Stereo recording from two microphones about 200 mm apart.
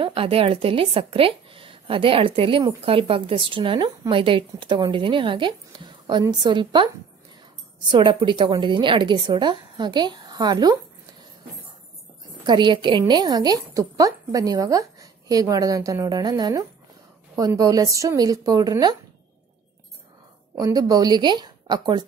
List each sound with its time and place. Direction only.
0.0 s a woman's voice: 25° right (ahead or behind)
7.9 s a woman's voice: 25° right (ahead or behind)
12.4 s a woman's voice: 20° right (ahead or behind)
20.5 s a woman's voice: 20° right (ahead or behind)